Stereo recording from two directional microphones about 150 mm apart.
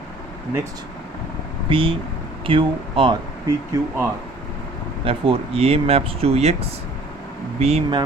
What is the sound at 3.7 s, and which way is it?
Speech, 25° right (ahead or behind).